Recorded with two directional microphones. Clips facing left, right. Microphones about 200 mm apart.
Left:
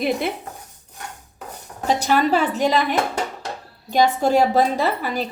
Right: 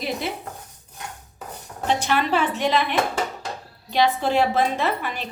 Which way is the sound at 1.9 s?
40° left (ahead or behind).